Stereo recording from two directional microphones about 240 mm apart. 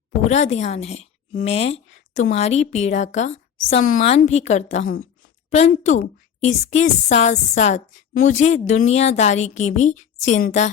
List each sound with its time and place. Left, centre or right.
0.3 s a woman's voice: left